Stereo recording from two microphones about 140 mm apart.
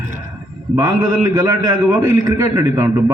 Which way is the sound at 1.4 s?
25° right (ahead or behind).